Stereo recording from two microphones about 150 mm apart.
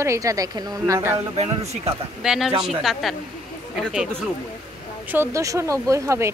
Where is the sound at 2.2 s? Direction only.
5° right (ahead or behind).